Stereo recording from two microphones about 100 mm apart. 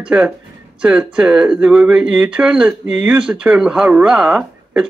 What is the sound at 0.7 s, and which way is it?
Speech, 10° right (ahead or behind).